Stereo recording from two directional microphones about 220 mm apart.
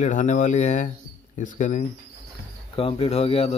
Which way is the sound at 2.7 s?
25° left (ahead or behind).